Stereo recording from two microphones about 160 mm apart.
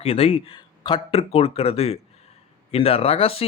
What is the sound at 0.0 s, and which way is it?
Speech, 40° left (ahead or behind).